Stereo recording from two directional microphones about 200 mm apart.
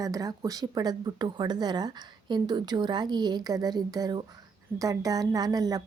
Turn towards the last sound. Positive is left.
turn(degrees=-20)  # may be behind; listen again after turning